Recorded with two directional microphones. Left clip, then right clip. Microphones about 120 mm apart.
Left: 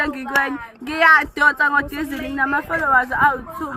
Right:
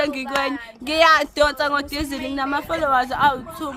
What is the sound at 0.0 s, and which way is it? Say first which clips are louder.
Speech: left 2 dB; 45° right (ahead or behind).